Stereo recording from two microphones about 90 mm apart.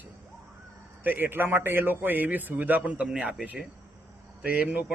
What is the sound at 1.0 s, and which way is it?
A man's voice, 20° right (ahead or behind).